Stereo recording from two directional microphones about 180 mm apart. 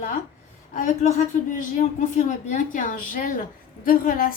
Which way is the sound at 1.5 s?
45° left (ahead or behind).